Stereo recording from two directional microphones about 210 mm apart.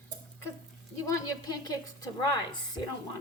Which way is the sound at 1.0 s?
15° left (ahead or behind).